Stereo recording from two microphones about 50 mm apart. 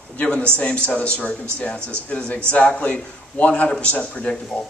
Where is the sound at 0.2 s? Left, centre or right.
Left.